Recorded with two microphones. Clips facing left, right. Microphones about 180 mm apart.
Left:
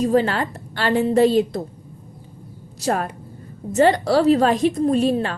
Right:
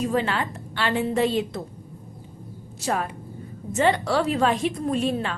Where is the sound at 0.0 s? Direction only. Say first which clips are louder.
Left 6 dB; 40° left (ahead or behind).